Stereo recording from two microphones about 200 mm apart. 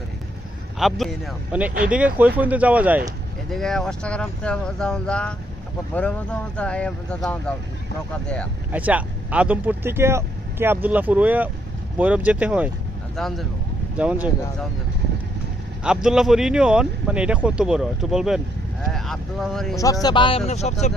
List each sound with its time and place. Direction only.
0.8 s speech: centre (ahead or behind)
8.7 s speech: 5° right (ahead or behind)
15.8 s speech: 5° right (ahead or behind)
19.7 s speech: 15° left (ahead or behind); by 20.7 s 35° left (ahead or behind)